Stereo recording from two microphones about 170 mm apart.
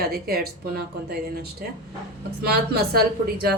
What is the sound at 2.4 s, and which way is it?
Speech, 65° right (ahead or behind).